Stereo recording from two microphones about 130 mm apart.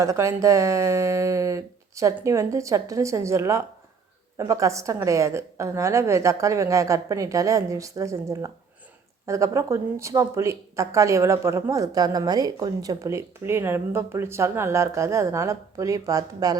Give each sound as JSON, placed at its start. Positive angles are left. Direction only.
{"t": 0.0, "sound": "a woman's voice", "side_deg": -25}